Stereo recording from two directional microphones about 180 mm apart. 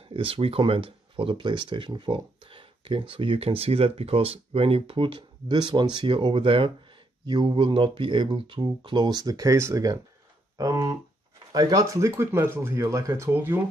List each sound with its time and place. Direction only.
0.1 s speech: 30° right (ahead or behind); by 13.6 s 15° right (ahead or behind)